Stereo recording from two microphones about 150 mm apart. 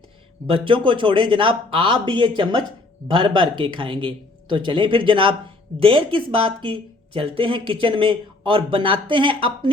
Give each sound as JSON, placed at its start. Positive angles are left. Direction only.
{"t": 0.4, "sound": "speech", "side_deg": -35}